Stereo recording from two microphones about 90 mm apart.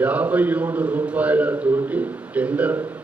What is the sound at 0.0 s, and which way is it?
A man's voice, 15° right (ahead or behind).